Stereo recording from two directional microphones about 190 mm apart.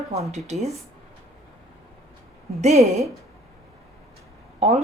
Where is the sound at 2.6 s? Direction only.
35° right (ahead or behind).